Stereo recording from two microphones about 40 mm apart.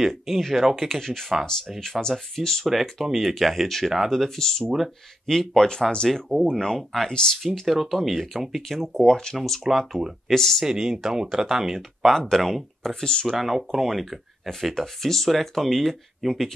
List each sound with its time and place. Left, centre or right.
0.4 s speech: centre; by 6.0 s left
6.0 s speech: centre
6.3 s speech: left
7.6 s speech: centre
8.9 s speech: centre
9.4 s speech: centre
10.6 s speech: centre
12.0 s speech: centre
13.4 s speech: centre